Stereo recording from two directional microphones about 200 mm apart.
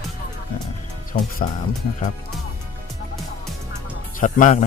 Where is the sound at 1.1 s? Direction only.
45° left (ahead or behind).